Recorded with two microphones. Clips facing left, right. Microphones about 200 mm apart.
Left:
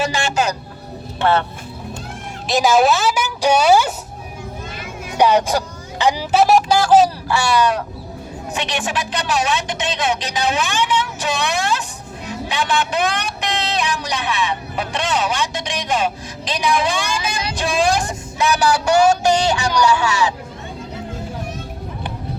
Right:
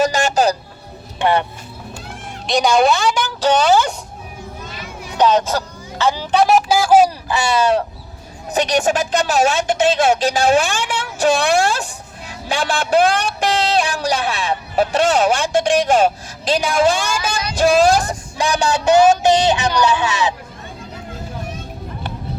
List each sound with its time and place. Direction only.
0.0 s music: 40° right (ahead or behind)
1.2 s speech: 15° right (ahead or behind)
2.5 s a woman's voice: 5° left (ahead or behind)
5.1 s speech: 10° left (ahead or behind)
6.4 s speech: 5° right (ahead or behind); by 7.8 s 25° right (ahead or behind)
8.5 s speech: 40° right (ahead or behind)
18.3 s speech: 30° right (ahead or behind)